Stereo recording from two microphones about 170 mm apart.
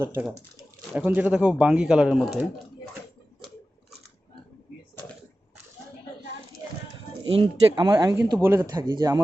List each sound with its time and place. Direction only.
0.0 s speech: 15° right (ahead or behind)
7.3 s speech: 25° right (ahead or behind)